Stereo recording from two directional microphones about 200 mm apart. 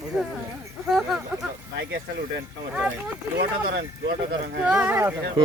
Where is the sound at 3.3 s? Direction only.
55° right (ahead or behind).